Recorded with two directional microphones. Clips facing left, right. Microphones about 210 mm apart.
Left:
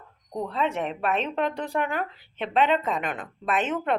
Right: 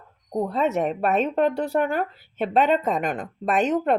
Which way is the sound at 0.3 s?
40° right (ahead or behind).